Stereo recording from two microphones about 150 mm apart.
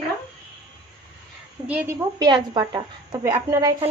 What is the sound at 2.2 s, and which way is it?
A woman's voice, 25° right (ahead or behind).